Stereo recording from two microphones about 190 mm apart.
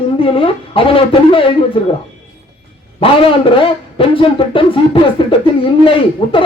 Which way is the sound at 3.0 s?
30° left (ahead or behind).